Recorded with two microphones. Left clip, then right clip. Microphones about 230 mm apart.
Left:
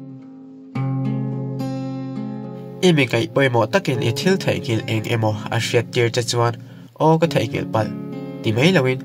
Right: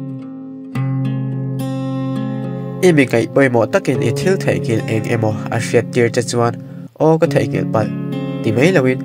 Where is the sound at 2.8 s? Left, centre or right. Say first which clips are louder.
Right 5 dB; centre.